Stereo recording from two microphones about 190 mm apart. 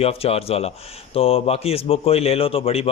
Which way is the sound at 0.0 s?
30° left (ahead or behind).